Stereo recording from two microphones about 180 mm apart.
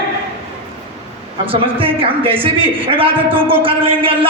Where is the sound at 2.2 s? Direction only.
30° right (ahead or behind).